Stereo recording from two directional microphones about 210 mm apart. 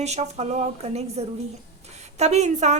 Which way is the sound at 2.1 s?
30° right (ahead or behind).